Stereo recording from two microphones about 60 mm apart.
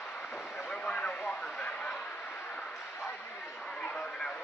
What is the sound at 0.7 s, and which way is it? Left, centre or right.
Vehicle, centre.